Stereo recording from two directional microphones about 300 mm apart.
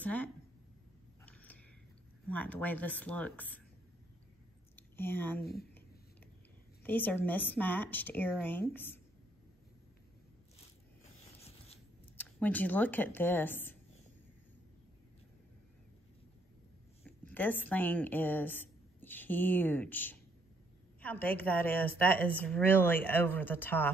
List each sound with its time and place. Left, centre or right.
0.0 s a woman's voice: centre
1.2 s a sound: centre
2.2 s speech: centre
4.7 s speech: centre
5.4 s speech: left
6.8 s speech: centre
12.2 s a woman's voice: centre
17.0 s a woman's voice: centre